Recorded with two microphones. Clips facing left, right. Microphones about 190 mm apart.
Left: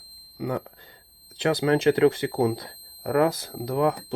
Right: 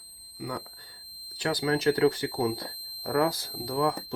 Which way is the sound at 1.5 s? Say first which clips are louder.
Left 4 dB; 25° left (ahead or behind).